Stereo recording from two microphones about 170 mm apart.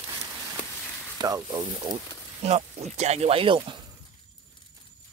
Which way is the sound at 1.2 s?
20° right (ahead or behind).